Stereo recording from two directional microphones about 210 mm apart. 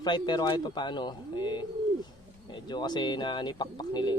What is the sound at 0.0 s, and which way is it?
Speech, 20° left (ahead or behind).